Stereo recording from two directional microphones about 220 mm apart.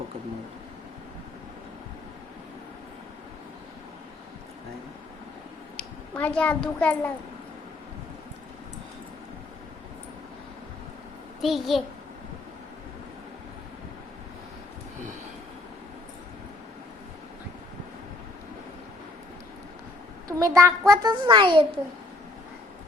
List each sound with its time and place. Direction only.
5.7 s a child's voice: 5° left (ahead or behind)
11.4 s a child's voice: centre (ahead or behind)
20.2 s a child's voice: 15° right (ahead or behind)